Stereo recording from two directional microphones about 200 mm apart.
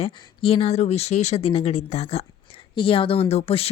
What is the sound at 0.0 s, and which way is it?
Speech, 30° left (ahead or behind).